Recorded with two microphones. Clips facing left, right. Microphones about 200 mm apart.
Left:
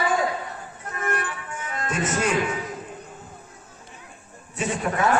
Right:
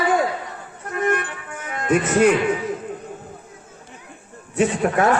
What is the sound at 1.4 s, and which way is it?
Music, 60° right (ahead or behind).